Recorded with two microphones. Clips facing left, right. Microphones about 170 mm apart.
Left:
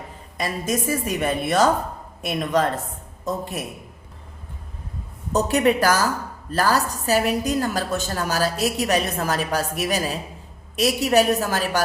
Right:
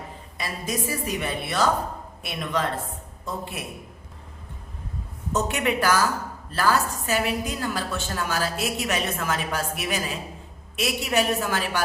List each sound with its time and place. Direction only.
0.3 s a woman's voice: 45° left (ahead or behind)
5.3 s a woman's voice: 35° left (ahead or behind)